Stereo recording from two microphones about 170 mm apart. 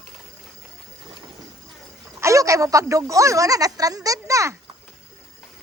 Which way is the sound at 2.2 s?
20° right (ahead or behind).